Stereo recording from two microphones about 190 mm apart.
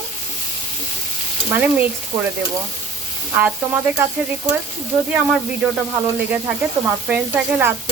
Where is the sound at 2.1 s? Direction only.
20° right (ahead or behind).